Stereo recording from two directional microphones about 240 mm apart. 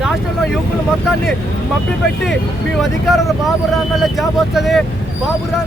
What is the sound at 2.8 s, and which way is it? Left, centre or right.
Speech, centre.